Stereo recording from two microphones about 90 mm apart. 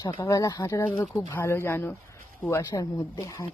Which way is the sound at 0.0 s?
45° left (ahead or behind).